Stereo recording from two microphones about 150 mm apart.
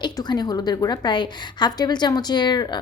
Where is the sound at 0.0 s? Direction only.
30° left (ahead or behind).